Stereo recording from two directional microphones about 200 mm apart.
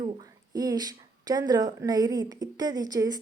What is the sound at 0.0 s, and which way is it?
Speech, 20° right (ahead or behind).